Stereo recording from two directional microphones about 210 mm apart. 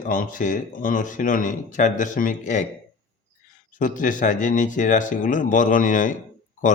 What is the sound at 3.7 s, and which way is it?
Speech, 40° left (ahead or behind).